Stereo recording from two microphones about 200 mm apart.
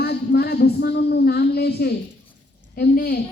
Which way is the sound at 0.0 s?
55° left (ahead or behind).